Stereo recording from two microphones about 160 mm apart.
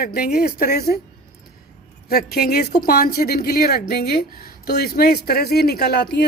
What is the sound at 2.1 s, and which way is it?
A woman's voice, 75° left (ahead or behind).